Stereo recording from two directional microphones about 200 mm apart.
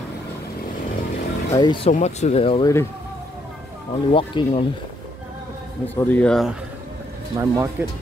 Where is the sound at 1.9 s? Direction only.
35° left (ahead or behind).